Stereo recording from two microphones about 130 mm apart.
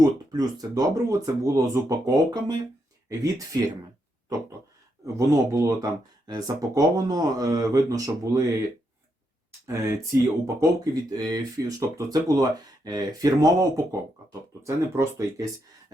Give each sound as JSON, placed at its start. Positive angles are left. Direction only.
{"t": 0.0, "sound": "speech", "side_deg": -30}
{"t": 5.0, "sound": "speech", "side_deg": -25}
{"t": 9.6, "sound": "speech", "side_deg": -20}